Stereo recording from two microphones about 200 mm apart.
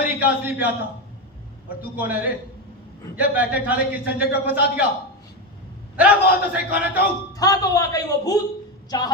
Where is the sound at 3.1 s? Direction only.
5° right (ahead or behind).